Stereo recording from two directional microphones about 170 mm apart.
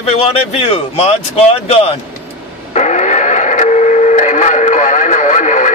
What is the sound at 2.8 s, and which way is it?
Radio, 45° left (ahead or behind).